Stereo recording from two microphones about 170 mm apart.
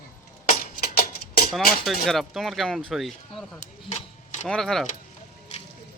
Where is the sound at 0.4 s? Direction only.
55° left (ahead or behind).